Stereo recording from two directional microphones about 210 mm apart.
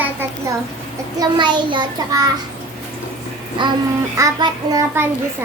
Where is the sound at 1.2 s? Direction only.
20° right (ahead or behind).